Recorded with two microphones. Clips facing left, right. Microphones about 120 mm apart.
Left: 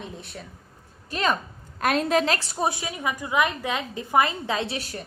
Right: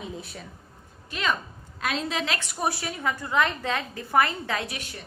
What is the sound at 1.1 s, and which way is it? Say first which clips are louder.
Speech: left 3 dB; 40° left (ahead or behind).